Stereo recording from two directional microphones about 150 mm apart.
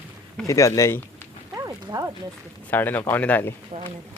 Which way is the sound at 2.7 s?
10° left (ahead or behind).